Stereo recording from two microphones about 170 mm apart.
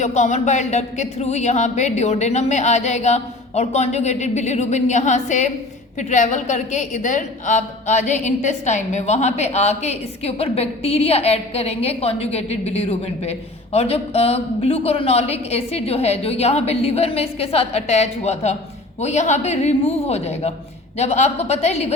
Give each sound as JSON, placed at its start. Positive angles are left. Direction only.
{"t": 0.0, "sound": "a woman's voice", "side_deg": 45}